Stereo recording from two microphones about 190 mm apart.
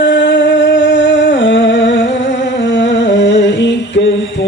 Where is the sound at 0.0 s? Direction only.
75° left (ahead or behind).